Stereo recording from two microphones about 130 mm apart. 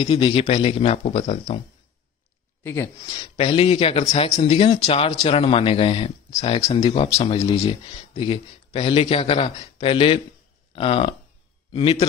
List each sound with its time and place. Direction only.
0.0 s speech: 40° left (ahead or behind)
2.6 s speech: 25° left (ahead or behind)
3.2 s speech: 45° left (ahead or behind)